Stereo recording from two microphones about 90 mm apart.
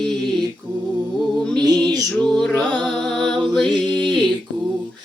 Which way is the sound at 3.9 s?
60° right (ahead or behind).